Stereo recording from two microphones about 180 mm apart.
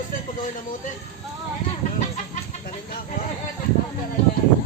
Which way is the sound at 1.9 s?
45° left (ahead or behind).